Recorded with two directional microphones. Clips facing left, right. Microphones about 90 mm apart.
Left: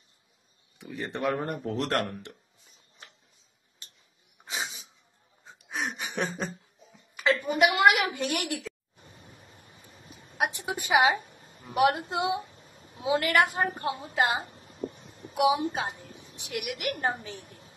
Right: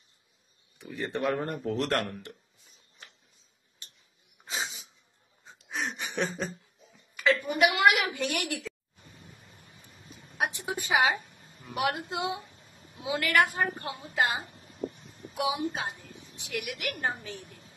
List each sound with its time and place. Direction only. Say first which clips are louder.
0.7 s speech: right 1 dB; 25° left (ahead or behind)
4.5 s sneeze: even; 30° left (ahead or behind)
5.7 s chuckle: left 1 dB; 30° left (ahead or behind)
8.6 s a sound: even; 30° left (ahead or behind)
10.9 s a woman's voice: left 3 dB; 30° left (ahead or behind)
17.4 s a sound: even; 35° left (ahead or behind)